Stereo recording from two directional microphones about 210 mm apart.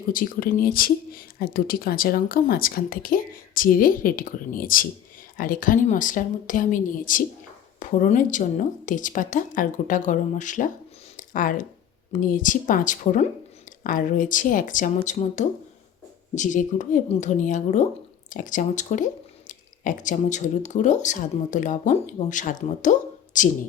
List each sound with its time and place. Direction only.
0.1 s speech: 40° left (ahead or behind)
11.2 s a sound: 40° left (ahead or behind)
12.1 s speech: 40° left (ahead or behind)